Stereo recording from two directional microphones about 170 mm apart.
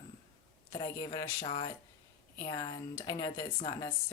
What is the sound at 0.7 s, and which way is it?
A woman's voice, 25° left (ahead or behind).